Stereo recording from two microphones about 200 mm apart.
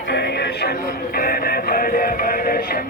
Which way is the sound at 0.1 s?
55° left (ahead or behind).